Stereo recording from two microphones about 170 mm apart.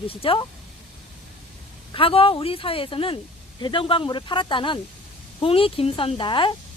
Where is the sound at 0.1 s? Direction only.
30° left (ahead or behind).